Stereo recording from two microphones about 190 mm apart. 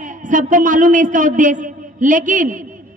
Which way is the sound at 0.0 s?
40° right (ahead or behind).